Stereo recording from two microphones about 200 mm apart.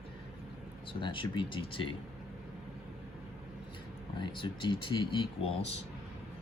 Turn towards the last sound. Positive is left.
turn(degrees=25)  # may be behind; listen again after turning